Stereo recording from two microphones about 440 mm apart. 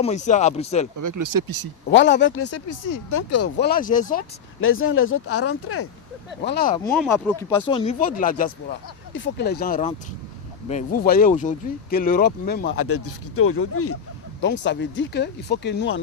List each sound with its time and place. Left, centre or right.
0.0 s speech: centre
0.9 s speech: right
1.9 s speech: left
3.6 s speech: centre
6.8 s speech: centre; by 16.0 s left